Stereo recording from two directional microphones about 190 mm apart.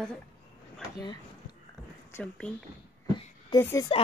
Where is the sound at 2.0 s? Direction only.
10° left (ahead or behind).